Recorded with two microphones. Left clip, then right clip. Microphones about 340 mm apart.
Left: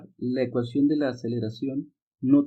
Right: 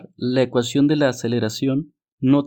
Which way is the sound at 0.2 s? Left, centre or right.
Right.